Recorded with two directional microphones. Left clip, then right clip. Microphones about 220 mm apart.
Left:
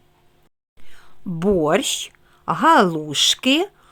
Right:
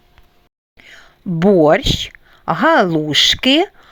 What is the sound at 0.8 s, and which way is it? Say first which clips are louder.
Whispering: right 10 dB; 15° right (ahead or behind).